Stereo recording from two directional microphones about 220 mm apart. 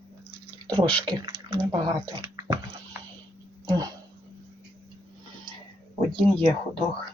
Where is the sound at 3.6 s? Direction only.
15° right (ahead or behind).